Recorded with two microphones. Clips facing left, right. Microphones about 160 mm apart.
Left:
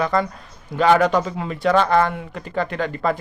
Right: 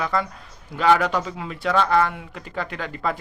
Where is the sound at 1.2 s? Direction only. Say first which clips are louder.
Left 4 dB; 50° left (ahead or behind).